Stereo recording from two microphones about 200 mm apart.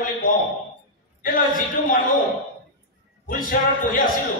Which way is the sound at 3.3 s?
45° left (ahead or behind).